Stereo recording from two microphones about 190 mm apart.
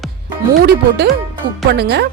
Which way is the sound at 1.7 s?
60° right (ahead or behind).